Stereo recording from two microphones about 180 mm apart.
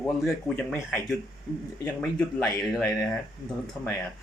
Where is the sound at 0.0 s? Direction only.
10° left (ahead or behind).